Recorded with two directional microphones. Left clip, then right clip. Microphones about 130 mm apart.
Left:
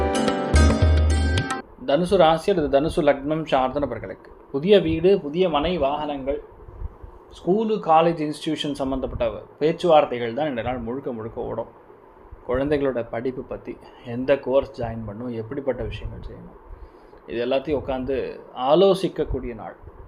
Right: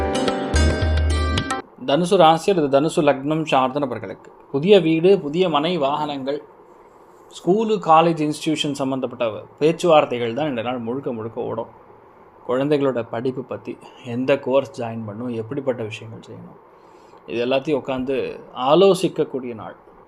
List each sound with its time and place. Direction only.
0.3 s music: centre (ahead or behind)
1.8 s speech: 55° right (ahead or behind)
4.5 s a man's voice: 40° right (ahead or behind); by 6.1 s 80° right
7.4 s speech: 60° right (ahead or behind); by 13.7 s 40° right (ahead or behind)
14.0 s speech: 55° right (ahead or behind)
17.2 s speech: 45° right (ahead or behind)